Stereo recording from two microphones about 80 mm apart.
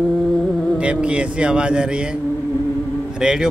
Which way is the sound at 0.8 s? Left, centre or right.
Centre.